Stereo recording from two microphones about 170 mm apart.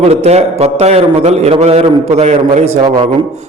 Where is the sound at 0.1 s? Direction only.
40° right (ahead or behind).